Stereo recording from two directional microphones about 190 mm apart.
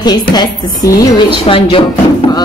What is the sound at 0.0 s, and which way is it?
A woman's voice, 20° left (ahead or behind).